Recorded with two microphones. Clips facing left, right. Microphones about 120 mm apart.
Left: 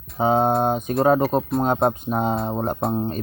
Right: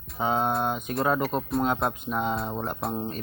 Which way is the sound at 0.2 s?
35° left (ahead or behind).